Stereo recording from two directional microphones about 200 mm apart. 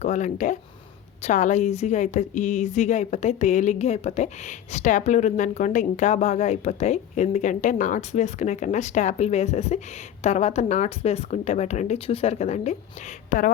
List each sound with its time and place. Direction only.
0.0 s a woman's voice: 35° left (ahead or behind)